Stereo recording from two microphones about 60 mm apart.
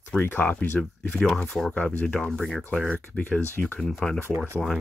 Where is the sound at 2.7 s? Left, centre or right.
Centre.